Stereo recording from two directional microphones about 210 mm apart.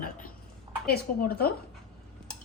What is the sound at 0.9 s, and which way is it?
Speech, 45° left (ahead or behind).